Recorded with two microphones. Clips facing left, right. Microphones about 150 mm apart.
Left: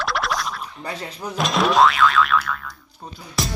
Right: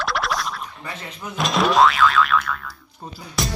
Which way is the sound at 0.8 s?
35° left (ahead or behind).